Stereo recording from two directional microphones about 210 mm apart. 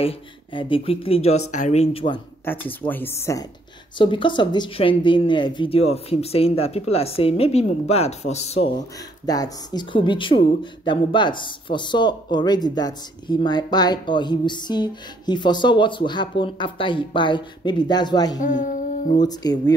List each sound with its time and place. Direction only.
0.0 s speech: 25° left (ahead or behind)
2.4 s speech: 10° left (ahead or behind); by 8.7 s 30° left (ahead or behind)
9.2 s speech: 15° left (ahead or behind)
18.4 s music: 35° left (ahead or behind)
19.2 s speech: 20° left (ahead or behind)